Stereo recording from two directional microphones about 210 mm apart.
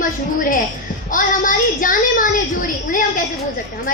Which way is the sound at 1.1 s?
40° left (ahead or behind).